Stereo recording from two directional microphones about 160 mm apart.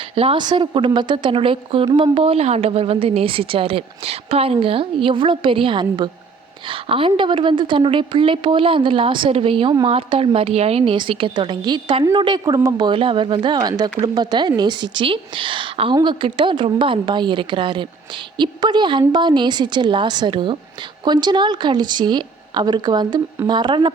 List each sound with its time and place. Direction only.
0.2 s a woman's voice: 30° right (ahead or behind)